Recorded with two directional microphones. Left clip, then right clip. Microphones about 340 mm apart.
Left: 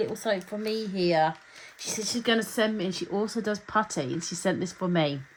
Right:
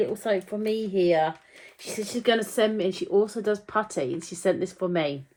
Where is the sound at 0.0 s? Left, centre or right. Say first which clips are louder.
Right 3 dB; centre.